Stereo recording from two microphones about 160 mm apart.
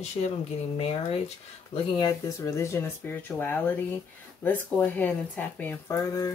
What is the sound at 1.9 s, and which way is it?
Speech, 20° left (ahead or behind).